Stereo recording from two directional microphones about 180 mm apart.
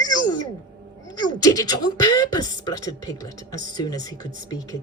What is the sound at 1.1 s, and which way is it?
Speech, 20° left (ahead or behind).